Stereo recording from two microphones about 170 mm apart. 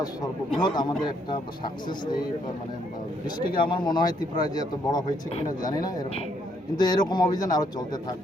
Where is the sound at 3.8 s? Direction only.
25° left (ahead or behind).